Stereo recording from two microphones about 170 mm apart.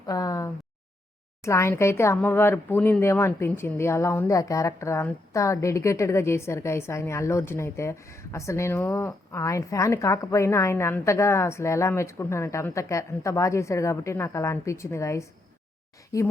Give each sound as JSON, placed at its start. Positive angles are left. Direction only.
{"t": 0.1, "sound": "speech", "side_deg": 20}